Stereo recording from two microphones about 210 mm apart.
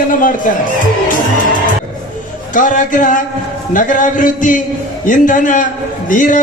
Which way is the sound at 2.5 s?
40° left (ahead or behind).